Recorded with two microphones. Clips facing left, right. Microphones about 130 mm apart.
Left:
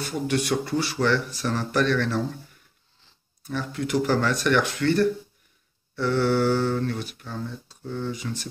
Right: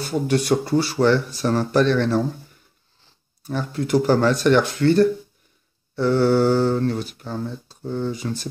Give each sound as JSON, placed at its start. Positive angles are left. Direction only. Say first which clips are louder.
{"t": 0.0, "sound": "speech", "louder": "right 4 dB", "side_deg": -35}
{"t": 3.4, "sound": "speech", "louder": "right 4 dB", "side_deg": -35}